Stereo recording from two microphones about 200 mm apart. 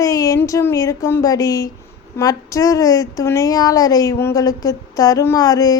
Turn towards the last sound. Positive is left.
turn(degrees=20)  # may be behind; listen again after turning